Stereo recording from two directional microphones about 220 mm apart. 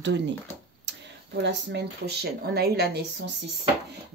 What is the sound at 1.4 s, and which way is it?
Speech, 50° right (ahead or behind).